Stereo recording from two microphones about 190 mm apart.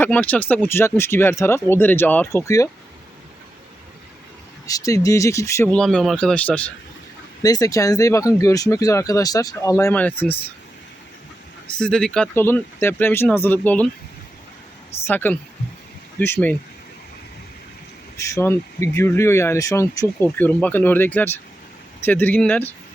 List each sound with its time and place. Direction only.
0.0 s speech: 10° left (ahead or behind)
4.6 s speech: 20° left (ahead or behind)
5.7 s speech: 5° left (ahead or behind)
7.4 s speech: 20° left (ahead or behind)
11.7 s speech: 5° left (ahead or behind)
15.0 s speech: 10° left (ahead or behind)
18.2 s speech: 15° left (ahead or behind)